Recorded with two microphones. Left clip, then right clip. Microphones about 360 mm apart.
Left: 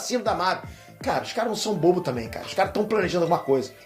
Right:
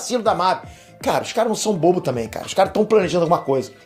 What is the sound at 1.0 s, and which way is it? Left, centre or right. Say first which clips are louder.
A man's voice: right 6 dB; right.